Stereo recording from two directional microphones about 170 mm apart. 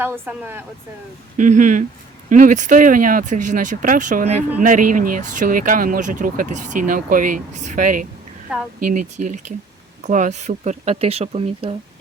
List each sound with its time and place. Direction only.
0.0 s speech: 10° right (ahead or behind)
1.4 s speech: 45° right (ahead or behind)
8.5 s a woman's voice: 5° right (ahead or behind)
8.9 s speech: 45° right (ahead or behind)